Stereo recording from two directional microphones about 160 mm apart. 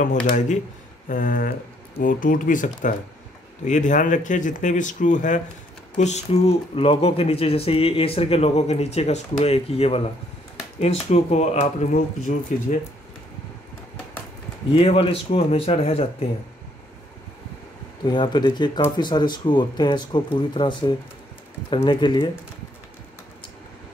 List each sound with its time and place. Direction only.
1.0 s speech: 60° left (ahead or behind)
14.7 s speech: 35° left (ahead or behind)
18.0 s speech: 30° left (ahead or behind)